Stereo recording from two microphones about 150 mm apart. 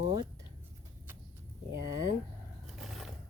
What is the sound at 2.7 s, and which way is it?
Vehicle, centre (ahead or behind).